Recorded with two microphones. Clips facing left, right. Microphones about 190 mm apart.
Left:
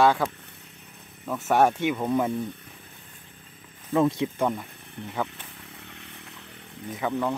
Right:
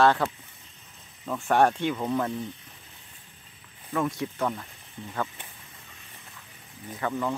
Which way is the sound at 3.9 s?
25° left (ahead or behind).